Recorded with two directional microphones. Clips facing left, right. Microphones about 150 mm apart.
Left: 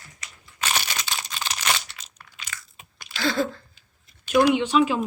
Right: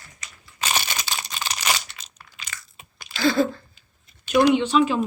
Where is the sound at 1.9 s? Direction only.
Centre (ahead or behind).